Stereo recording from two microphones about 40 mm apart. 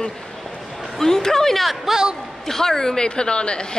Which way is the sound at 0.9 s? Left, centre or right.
Centre.